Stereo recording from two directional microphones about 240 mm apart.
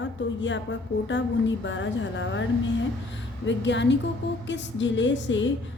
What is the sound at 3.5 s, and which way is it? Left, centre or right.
A woman's voice, left.